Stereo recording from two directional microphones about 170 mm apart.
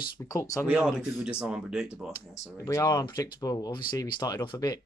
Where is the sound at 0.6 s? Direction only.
5° right (ahead or behind).